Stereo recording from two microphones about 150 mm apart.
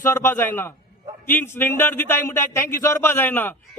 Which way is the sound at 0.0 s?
15° left (ahead or behind).